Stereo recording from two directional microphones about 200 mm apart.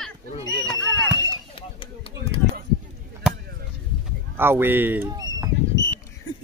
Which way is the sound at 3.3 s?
5° right (ahead or behind).